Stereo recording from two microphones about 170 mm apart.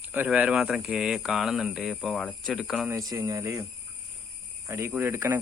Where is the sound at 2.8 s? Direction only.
20° right (ahead or behind).